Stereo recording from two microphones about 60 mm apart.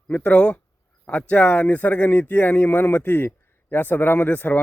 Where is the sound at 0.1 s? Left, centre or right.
Left.